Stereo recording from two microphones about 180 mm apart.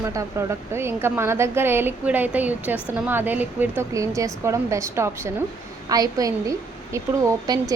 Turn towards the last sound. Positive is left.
turn(degrees=-20)  # may be behind; listen again after turning